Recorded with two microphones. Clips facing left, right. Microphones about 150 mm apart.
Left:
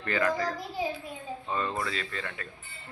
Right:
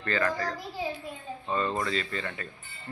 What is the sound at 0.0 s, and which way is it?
Speech, 15° left (ahead or behind).